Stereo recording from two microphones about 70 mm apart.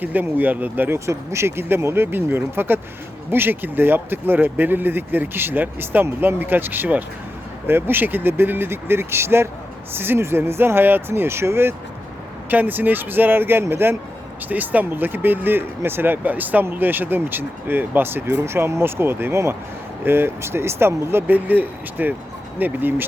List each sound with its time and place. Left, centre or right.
0.0 s speech: right
0.9 s speech: right
12.5 s speech: right